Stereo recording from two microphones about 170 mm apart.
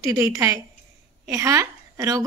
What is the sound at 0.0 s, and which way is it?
A woman's voice, 20° right (ahead or behind).